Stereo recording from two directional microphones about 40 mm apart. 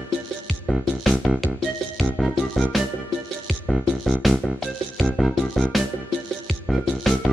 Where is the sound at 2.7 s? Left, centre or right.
Centre.